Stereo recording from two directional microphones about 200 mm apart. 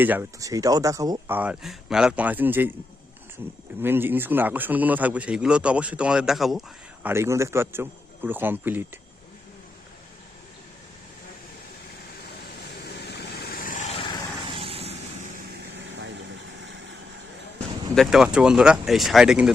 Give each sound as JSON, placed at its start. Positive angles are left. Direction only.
{"t": 0.0, "sound": "a man's voice", "side_deg": -10}
{"t": 1.4, "sound": "a man's voice", "side_deg": -5}
{"t": 3.8, "sound": "a man's voice", "side_deg": -10}
{"t": 7.1, "sound": "a man's voice", "side_deg": -15}
{"t": 12.8, "sound": "vehicle", "side_deg": 55}
{"t": 14.4, "sound": "a sound", "side_deg": -25}
{"t": 17.9, "sound": "speech", "side_deg": 0}